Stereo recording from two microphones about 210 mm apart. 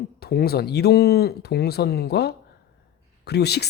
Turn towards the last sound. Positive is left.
turn(degrees=50)  # may be behind; listen again after turning